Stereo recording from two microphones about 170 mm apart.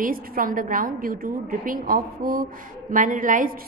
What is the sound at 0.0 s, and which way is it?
A woman's voice, 55° right (ahead or behind).